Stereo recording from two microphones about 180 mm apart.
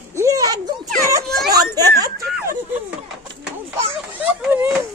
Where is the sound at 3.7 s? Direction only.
10° right (ahead or behind).